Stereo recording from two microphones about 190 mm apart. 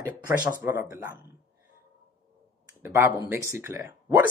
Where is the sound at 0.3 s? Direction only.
10° right (ahead or behind).